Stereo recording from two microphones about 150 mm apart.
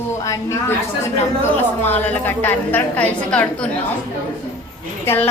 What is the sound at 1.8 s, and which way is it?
A woman's voice, 15° left (ahead or behind).